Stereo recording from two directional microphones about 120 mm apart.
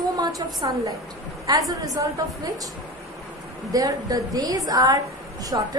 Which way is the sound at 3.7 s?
30° right (ahead or behind).